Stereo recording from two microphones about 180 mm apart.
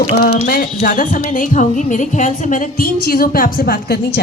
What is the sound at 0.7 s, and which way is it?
A woman's voice, 45° left (ahead or behind).